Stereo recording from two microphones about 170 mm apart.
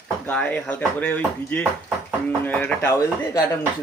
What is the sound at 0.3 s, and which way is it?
Speech, 10° left (ahead or behind).